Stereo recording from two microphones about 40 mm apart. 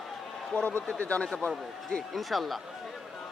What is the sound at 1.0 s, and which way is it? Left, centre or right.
Speech, left.